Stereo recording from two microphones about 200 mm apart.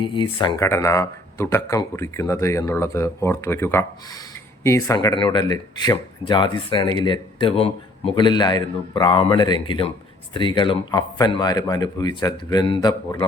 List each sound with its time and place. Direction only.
0.0 s speech: 25° left (ahead or behind)